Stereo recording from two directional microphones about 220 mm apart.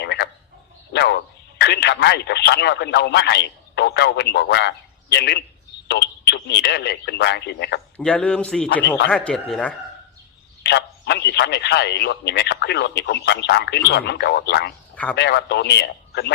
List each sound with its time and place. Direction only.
0.0 s a sound: 50° left (ahead or behind)
0.9 s speech: 50° left (ahead or behind)
7.9 s speech: 5° left (ahead or behind)
10.6 s a man's voice: 50° left (ahead or behind)